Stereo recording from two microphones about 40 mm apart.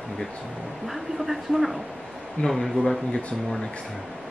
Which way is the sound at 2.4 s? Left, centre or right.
Centre.